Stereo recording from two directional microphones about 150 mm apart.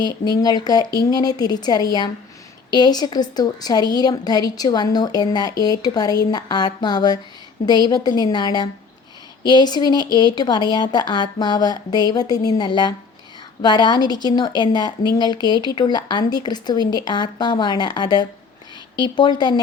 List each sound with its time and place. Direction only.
0.0 s a woman's voice: 25° left (ahead or behind)